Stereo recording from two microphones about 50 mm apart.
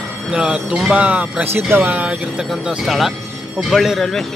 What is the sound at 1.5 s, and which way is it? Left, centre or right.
Speech, right.